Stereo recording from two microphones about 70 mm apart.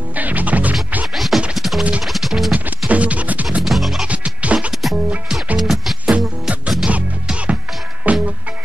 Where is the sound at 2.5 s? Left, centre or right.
Right.